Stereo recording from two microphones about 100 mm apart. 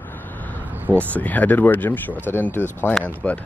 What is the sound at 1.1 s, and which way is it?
Speech, 15° left (ahead or behind).